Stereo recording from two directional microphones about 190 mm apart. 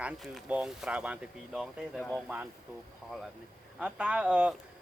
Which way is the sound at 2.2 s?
10° right (ahead or behind).